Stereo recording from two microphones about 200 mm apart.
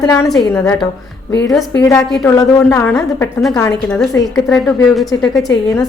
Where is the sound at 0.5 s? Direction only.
15° left (ahead or behind).